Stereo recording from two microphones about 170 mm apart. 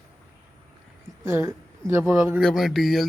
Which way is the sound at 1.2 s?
15° right (ahead or behind).